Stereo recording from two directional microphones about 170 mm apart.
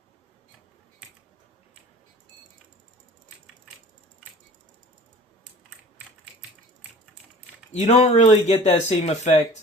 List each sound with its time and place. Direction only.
7.7 s speech: 40° left (ahead or behind)